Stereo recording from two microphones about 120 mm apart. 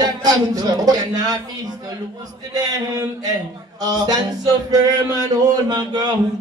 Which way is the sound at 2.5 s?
30° right (ahead or behind).